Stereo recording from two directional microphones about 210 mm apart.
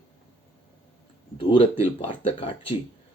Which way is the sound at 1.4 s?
25° left (ahead or behind).